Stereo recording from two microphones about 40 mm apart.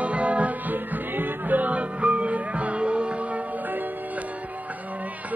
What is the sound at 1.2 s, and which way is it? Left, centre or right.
Music, right.